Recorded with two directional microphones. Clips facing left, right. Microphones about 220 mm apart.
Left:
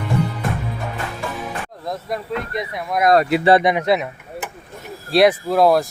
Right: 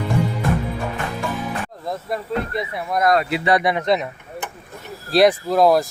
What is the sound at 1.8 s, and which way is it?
Speech, 5° right (ahead or behind).